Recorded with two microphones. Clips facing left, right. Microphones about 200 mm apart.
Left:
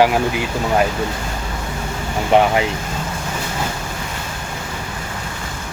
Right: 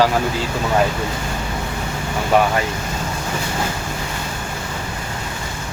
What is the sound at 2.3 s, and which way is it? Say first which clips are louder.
Speech: left 2 dB; 25° left (ahead or behind).